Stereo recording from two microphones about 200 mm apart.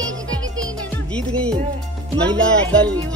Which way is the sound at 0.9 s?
5° left (ahead or behind).